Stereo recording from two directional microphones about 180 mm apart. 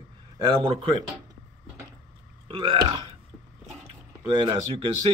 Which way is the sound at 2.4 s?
30° right (ahead or behind).